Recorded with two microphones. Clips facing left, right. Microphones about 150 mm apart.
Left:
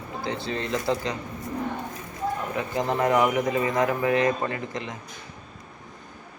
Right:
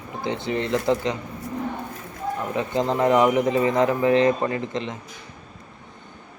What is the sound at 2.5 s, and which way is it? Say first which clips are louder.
Speech: right 5 dB; 20° right (ahead or behind).